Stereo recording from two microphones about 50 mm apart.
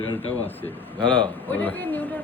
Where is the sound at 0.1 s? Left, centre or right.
Left.